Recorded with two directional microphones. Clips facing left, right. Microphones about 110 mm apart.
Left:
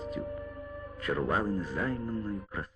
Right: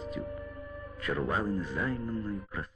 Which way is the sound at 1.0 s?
35° left (ahead or behind).